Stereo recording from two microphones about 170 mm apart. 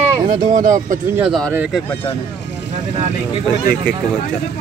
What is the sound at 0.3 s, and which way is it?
Speech, 50° right (ahead or behind).